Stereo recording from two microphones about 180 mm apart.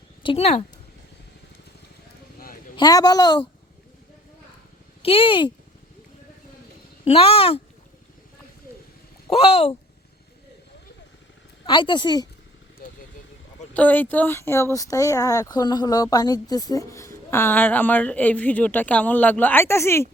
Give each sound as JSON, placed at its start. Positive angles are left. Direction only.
{"t": 0.2, "sound": "speech", "side_deg": 30}
{"t": 2.7, "sound": "a woman's voice", "side_deg": 20}
{"t": 5.0, "sound": "a woman's voice", "side_deg": 30}
{"t": 7.0, "sound": "speech", "side_deg": 35}
{"t": 9.2, "sound": "speech", "side_deg": 35}
{"t": 11.6, "sound": "a woman's voice", "side_deg": 25}
{"t": 13.7, "sound": "speech", "side_deg": 10}